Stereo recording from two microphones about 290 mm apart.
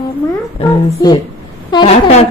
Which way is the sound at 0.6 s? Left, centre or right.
Centre.